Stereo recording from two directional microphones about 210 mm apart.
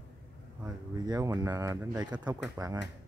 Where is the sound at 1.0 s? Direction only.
15° right (ahead or behind).